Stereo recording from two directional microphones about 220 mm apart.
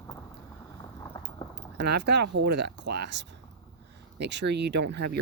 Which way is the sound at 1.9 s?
50° right (ahead or behind).